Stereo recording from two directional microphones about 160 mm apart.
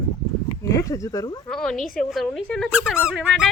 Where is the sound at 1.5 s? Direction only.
5° left (ahead or behind).